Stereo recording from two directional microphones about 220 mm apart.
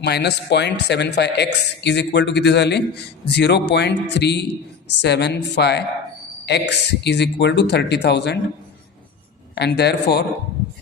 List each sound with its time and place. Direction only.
0.0 s speech: 50° left (ahead or behind)
9.6 s speech: 50° left (ahead or behind)